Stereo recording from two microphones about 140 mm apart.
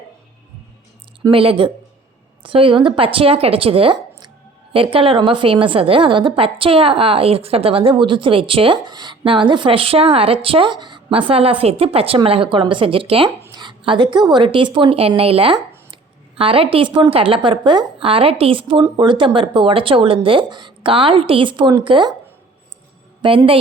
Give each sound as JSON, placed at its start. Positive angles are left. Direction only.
{"t": 1.3, "sound": "a woman's voice", "side_deg": -40}
{"t": 23.2, "sound": "a woman's voice", "side_deg": -35}